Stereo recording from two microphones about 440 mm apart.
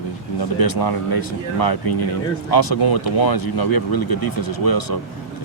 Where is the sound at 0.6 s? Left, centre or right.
Left.